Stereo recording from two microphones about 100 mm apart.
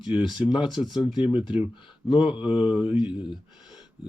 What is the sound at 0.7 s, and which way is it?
Speech, centre (ahead or behind).